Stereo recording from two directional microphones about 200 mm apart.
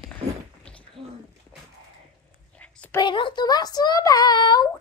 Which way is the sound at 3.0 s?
25° left (ahead or behind).